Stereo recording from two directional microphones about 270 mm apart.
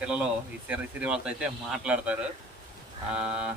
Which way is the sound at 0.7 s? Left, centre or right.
Centre.